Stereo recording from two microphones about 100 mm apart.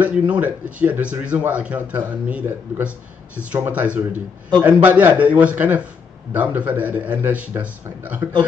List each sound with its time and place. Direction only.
0.0 s a man's voice: 15° right (ahead or behind)